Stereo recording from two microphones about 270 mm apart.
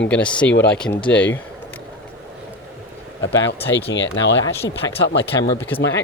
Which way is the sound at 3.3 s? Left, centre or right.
Centre.